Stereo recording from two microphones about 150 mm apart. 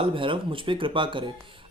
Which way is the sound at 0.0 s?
35° right (ahead or behind).